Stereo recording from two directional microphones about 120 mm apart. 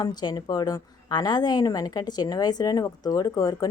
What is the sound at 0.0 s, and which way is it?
A woman's voice, 35° left (ahead or behind).